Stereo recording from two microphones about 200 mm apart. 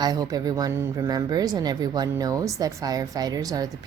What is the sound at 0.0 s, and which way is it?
A woman's voice, 20° right (ahead or behind).